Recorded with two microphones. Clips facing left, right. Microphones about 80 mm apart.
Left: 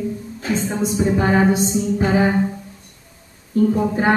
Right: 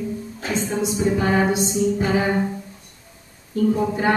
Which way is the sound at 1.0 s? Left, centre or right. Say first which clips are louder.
Left 3 dB; left.